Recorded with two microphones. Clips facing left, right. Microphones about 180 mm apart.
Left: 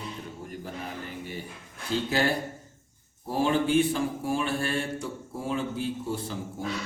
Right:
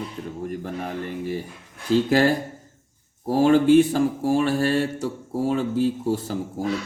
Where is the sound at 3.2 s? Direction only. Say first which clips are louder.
Right 8 dB; 40° right (ahead or behind).